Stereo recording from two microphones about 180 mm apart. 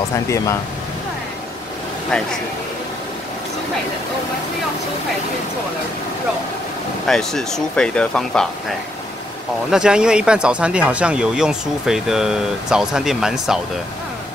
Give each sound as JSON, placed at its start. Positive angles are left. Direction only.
{"t": 7.1, "sound": "speech", "side_deg": 0}
{"t": 9.7, "sound": "speech", "side_deg": -5}